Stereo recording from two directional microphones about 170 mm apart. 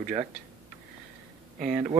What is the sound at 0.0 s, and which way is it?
Speech, 35° right (ahead or behind).